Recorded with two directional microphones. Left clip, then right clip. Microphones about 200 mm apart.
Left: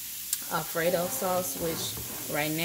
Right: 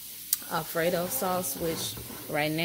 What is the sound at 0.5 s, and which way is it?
Speech, 15° right (ahead or behind).